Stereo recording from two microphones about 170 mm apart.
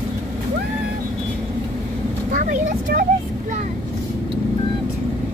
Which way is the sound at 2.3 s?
55° right (ahead or behind).